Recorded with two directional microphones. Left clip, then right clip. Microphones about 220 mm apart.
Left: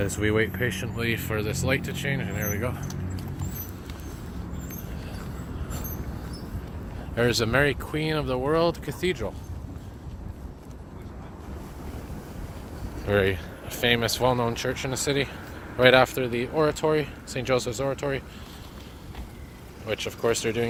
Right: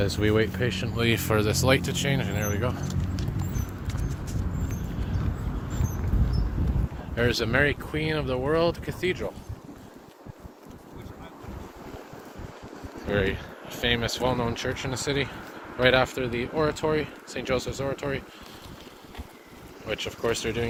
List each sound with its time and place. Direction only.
0.2 s speech: 5° right (ahead or behind)
0.9 s speech: 25° right (ahead or behind)
2.6 s speech: 5° right (ahead or behind)
7.2 s speech: 25° left (ahead or behind)
13.1 s speech: 35° left (ahead or behind)
19.9 s speech: 30° left (ahead or behind)